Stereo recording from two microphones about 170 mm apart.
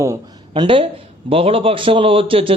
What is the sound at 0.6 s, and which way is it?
A man's voice, 30° right (ahead or behind).